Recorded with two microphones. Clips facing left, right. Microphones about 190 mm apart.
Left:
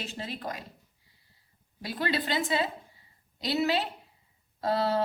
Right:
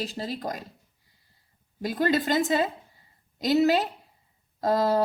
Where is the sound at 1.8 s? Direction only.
45° right (ahead or behind).